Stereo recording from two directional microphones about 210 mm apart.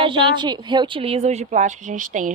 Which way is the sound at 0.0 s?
25° right (ahead or behind).